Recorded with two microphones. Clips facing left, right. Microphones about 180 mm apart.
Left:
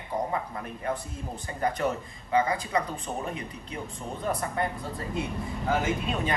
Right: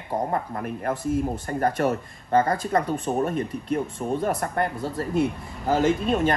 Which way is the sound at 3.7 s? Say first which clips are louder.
Right 12 dB; 60° right (ahead or behind).